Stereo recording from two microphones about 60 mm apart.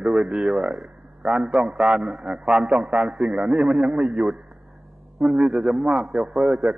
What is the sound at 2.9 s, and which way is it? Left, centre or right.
Speech, centre.